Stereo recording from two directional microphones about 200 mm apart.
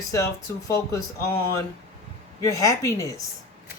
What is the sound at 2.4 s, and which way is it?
Speech, 15° left (ahead or behind).